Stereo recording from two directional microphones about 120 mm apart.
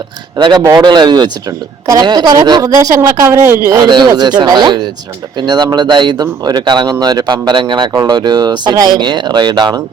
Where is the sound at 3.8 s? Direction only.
35° right (ahead or behind).